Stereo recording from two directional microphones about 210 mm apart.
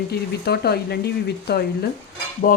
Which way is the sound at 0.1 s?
50° left (ahead or behind).